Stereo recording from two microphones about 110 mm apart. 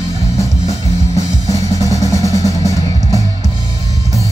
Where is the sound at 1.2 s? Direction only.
30° left (ahead or behind).